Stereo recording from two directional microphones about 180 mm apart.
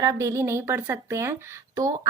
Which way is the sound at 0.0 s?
20° right (ahead or behind).